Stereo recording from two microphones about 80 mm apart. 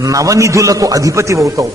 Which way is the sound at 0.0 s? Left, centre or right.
Right.